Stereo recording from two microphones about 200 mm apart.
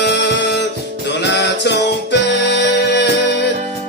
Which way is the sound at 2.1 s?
60° left (ahead or behind).